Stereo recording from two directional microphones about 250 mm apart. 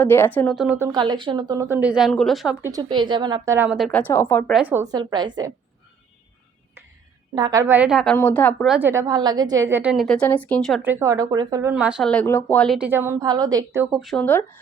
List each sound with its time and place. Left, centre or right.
0.0 s a woman's voice: centre
0.9 s speech: centre
4.5 s speech: centre
4.9 s speech: centre
7.3 s a woman's voice: centre
11.0 s speech: centre
13.9 s a woman's voice: centre